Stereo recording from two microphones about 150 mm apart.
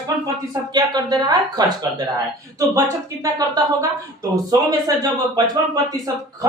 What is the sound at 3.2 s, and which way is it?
Speech, 25° right (ahead or behind).